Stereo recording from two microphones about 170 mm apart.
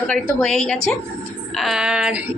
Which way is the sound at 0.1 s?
5° left (ahead or behind).